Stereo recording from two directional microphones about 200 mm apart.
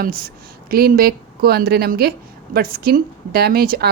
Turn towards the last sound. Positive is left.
turn(degrees=-45)  # may be behind; listen again after turning